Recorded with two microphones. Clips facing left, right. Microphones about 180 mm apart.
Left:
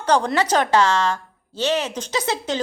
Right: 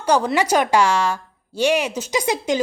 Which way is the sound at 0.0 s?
10° right (ahead or behind).